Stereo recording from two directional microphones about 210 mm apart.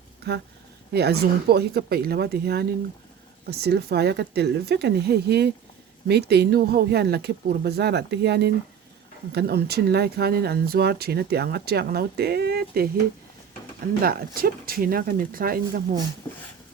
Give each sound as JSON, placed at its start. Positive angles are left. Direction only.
{"t": 0.3, "sound": "speech", "side_deg": -50}
{"t": 14.0, "sound": "speech", "side_deg": -45}